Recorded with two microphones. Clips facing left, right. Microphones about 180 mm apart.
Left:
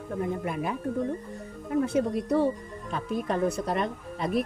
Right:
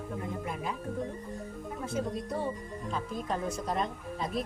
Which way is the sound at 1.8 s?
70° left (ahead or behind).